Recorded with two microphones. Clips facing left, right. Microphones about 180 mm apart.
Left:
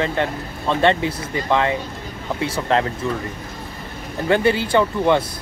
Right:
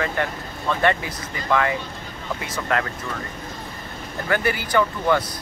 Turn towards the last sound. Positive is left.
turn(degrees=25)  # may be behind; listen again after turning